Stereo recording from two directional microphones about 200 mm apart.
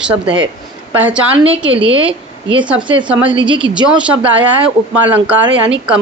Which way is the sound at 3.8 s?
5° right (ahead or behind).